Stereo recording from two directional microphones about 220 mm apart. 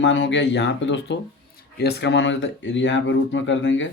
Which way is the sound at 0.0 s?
55° left (ahead or behind).